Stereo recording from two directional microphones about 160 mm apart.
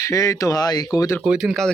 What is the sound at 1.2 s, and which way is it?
Speech, 5° right (ahead or behind).